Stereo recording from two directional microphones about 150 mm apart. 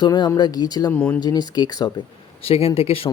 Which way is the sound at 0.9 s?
10° left (ahead or behind).